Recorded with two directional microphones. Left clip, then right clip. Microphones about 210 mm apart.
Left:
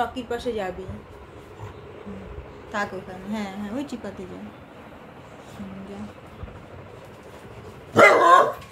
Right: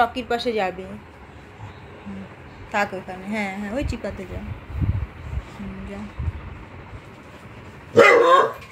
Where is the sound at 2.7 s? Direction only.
10° right (ahead or behind).